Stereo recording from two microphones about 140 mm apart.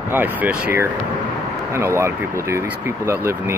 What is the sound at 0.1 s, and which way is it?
Speech, 15° right (ahead or behind).